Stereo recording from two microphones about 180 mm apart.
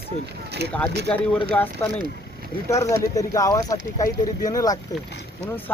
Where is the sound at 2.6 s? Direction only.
15° left (ahead or behind).